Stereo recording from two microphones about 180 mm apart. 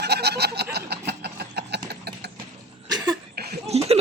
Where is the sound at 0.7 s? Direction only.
65° right (ahead or behind).